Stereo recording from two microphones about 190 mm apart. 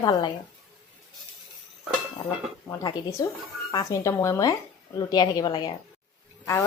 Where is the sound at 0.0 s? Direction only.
20° left (ahead or behind).